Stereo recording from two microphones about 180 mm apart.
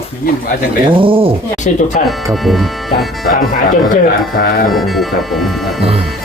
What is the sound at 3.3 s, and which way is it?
Speech, 45° left (ahead or behind).